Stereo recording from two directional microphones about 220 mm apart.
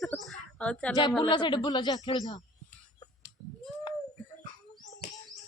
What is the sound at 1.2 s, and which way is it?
Speech, 20° left (ahead or behind).